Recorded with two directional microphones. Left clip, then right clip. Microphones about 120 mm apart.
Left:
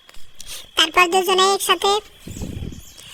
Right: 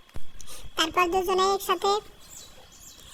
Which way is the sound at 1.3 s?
35° left (ahead or behind).